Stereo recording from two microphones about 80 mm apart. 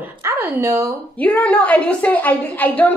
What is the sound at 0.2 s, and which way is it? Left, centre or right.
Speech, right.